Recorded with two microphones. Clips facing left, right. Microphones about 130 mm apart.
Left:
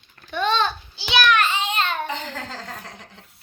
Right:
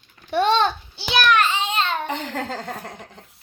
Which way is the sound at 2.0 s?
60° right (ahead or behind).